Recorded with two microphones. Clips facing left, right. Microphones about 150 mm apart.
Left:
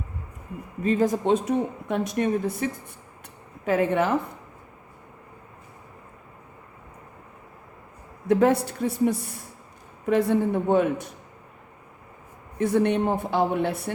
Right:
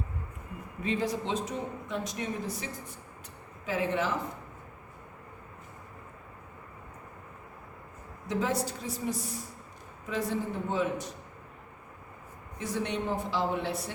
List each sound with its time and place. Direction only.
0.8 s speech: 45° left (ahead or behind)
8.3 s speech: 60° left (ahead or behind)
12.5 s speech: 55° left (ahead or behind)